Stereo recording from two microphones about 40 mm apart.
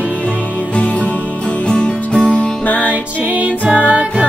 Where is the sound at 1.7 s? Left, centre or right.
Left.